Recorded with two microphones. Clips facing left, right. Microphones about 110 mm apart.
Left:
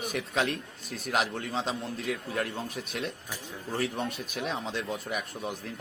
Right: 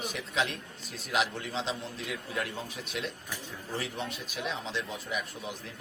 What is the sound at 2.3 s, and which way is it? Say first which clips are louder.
A man's voice: left 3 dB; 45° left (ahead or behind).